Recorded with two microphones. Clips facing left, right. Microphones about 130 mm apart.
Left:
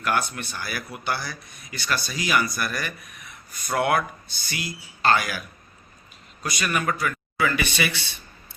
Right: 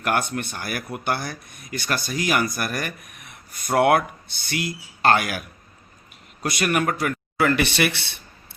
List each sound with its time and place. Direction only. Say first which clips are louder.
0.0 s speech: right 2 dB; 55° right (ahead or behind)
6.4 s speech: right 4 dB; 60° right (ahead or behind)